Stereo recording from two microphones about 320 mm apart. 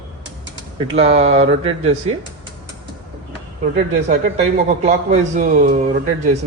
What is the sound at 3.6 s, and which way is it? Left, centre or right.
A man's voice, right.